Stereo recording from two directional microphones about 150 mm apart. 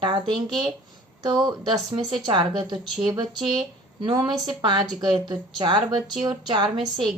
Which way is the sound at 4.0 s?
25° right (ahead or behind).